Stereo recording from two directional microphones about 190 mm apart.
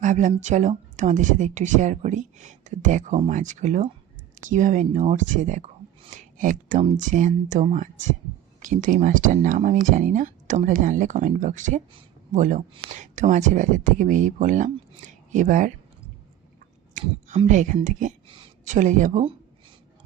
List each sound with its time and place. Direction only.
0.0 s speech: 40° right (ahead or behind)
16.9 s speech: 40° right (ahead or behind)